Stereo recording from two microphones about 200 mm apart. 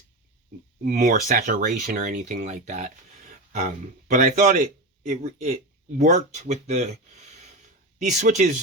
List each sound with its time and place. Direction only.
0.9 s speech: 45° right (ahead or behind)